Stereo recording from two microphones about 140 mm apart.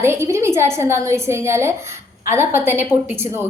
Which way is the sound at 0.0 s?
20° right (ahead or behind).